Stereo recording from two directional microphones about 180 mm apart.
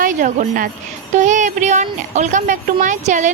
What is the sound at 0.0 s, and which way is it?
A woman's voice, 45° right (ahead or behind).